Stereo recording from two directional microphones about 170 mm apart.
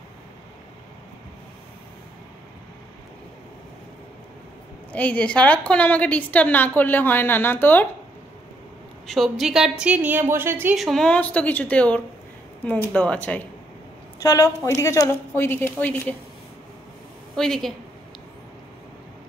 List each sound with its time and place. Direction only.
4.9 s a woman's voice: 5° left (ahead or behind)
9.0 s a woman's voice: centre (ahead or behind)
10.8 s a woman's voice: centre (ahead or behind)
14.2 s a woman's voice: 20° left (ahead or behind)
17.4 s a woman's voice: centre (ahead or behind)